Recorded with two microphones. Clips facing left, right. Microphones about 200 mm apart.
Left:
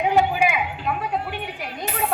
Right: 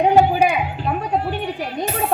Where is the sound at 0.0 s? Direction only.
40° right (ahead or behind).